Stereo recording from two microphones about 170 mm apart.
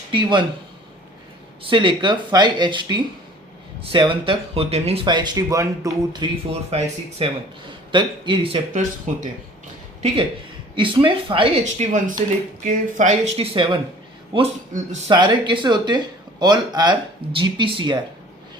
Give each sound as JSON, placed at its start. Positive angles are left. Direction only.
{"t": 0.1, "sound": "speech", "side_deg": -30}
{"t": 1.6, "sound": "speech", "side_deg": -30}
{"t": 6.5, "sound": "speech", "side_deg": -35}
{"t": 10.8, "sound": "speech", "side_deg": -30}
{"t": 11.6, "sound": "speech", "side_deg": -45}